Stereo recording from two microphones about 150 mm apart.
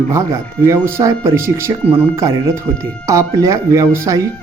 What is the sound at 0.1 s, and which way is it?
Speech, 20° right (ahead or behind).